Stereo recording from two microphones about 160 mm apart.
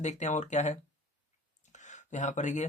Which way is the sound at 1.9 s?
50° left (ahead or behind).